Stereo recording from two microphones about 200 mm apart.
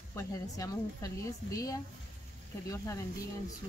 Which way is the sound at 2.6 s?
15° left (ahead or behind).